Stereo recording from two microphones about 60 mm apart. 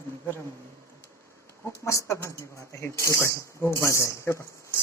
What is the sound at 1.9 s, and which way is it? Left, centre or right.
Speech, left.